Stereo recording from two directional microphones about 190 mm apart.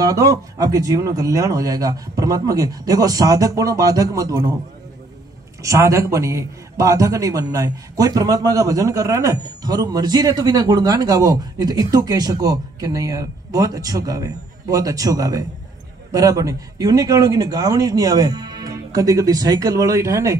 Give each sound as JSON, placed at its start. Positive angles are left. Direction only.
{"t": 0.0, "sound": "speech", "side_deg": -15}
{"t": 5.6, "sound": "a man's voice", "side_deg": -15}